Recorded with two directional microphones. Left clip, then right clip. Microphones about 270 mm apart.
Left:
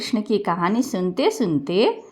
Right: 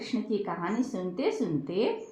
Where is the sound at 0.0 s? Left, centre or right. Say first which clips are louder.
Left 9 dB; left.